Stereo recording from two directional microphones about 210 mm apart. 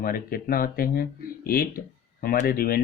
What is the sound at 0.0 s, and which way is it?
Speech, 45° left (ahead or behind).